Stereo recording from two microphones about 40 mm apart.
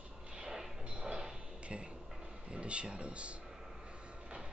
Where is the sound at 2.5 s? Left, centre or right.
Right.